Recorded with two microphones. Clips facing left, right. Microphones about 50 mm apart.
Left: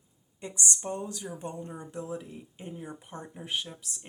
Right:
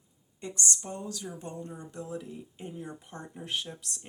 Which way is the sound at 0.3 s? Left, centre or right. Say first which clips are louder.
Even; centre.